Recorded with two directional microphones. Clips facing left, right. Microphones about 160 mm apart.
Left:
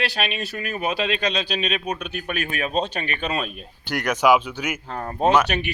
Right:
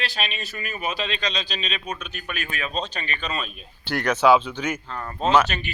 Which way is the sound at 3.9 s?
10° left (ahead or behind).